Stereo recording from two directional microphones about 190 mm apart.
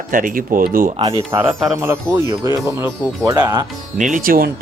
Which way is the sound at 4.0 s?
45° right (ahead or behind).